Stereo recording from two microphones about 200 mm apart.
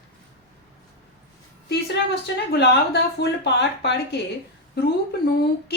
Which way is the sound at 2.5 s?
55° left (ahead or behind).